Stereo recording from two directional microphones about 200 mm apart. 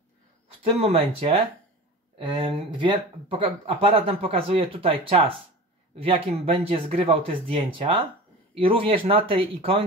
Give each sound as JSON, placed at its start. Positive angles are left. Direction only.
{"t": 0.5, "sound": "speech", "side_deg": -30}